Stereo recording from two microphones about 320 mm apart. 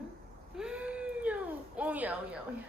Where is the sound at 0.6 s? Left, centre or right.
Centre.